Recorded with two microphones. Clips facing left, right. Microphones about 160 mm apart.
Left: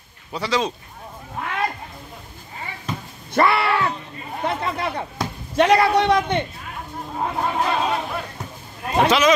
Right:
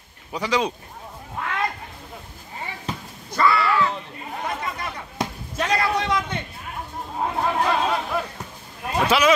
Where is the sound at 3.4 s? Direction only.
65° left (ahead or behind).